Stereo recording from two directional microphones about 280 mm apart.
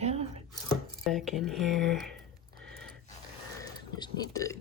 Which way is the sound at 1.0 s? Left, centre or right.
Centre.